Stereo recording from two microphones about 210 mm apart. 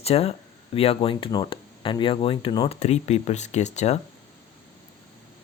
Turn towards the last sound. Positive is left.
turn(degrees=35)  # may be behind; listen again after turning